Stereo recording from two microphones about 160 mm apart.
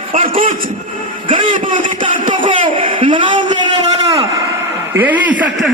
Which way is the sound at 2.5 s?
30° right (ahead or behind).